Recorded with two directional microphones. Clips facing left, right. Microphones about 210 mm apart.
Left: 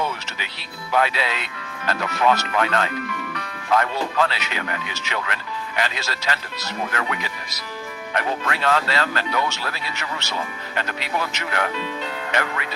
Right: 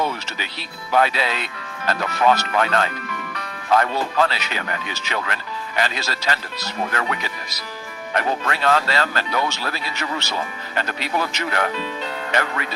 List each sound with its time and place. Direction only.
0.9 s speech: 35° right (ahead or behind)